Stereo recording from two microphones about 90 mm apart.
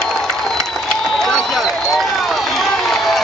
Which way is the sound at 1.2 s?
5° left (ahead or behind).